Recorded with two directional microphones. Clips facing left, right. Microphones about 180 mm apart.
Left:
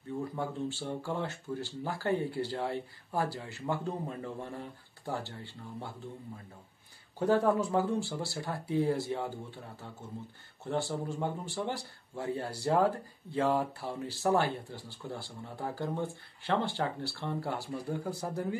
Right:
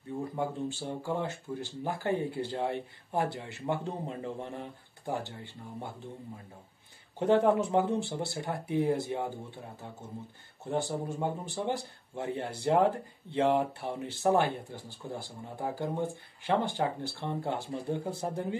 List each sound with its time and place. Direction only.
0.4 s speech: 15° right (ahead or behind)
7.2 s speech: 20° right (ahead or behind)
10.7 s speech: 15° right (ahead or behind)